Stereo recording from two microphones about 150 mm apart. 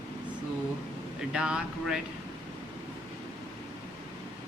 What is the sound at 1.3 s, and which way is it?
Speech, 5° right (ahead or behind).